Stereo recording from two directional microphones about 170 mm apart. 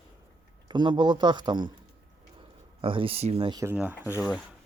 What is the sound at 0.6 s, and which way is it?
A man's voice, 25° right (ahead or behind).